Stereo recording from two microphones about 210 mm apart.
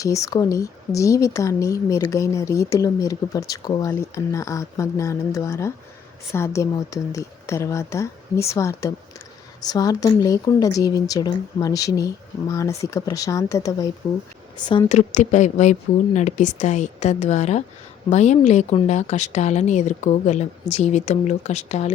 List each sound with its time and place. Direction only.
0.0 s speech: 15° left (ahead or behind); by 21.9 s 30° left (ahead or behind)